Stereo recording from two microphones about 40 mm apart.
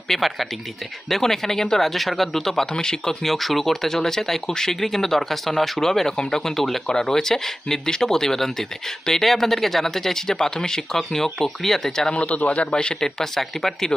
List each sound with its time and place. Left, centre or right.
0.1 s speech: centre
3.2 s speech: centre
12.1 s a man's voice: left
12.7 s speech: centre